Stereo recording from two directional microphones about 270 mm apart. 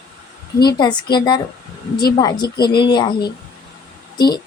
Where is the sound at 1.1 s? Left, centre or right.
Centre.